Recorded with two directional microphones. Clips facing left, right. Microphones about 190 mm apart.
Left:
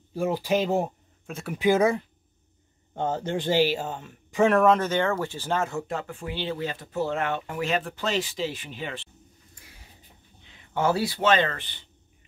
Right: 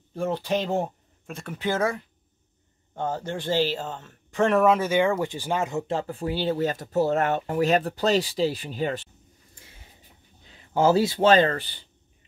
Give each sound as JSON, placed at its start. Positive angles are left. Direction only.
{"t": 0.1, "sound": "speech", "side_deg": 10}
{"t": 4.6, "sound": "speech", "side_deg": -5}
{"t": 10.4, "sound": "speech", "side_deg": -35}